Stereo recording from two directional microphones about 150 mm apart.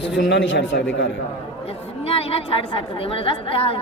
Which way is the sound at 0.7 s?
90° left.